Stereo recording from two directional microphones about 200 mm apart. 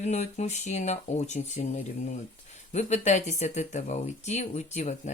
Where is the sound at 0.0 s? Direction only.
35° left (ahead or behind).